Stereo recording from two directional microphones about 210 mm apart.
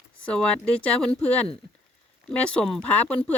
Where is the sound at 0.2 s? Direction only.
5° left (ahead or behind).